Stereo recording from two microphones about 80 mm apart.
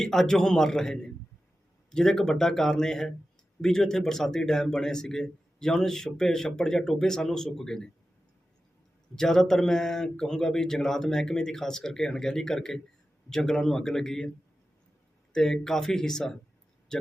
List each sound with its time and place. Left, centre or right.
0.0 s a man's voice: centre
9.1 s a man's voice: centre
15.3 s speech: centre